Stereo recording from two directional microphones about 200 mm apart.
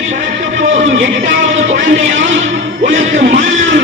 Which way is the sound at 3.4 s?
75° right (ahead or behind).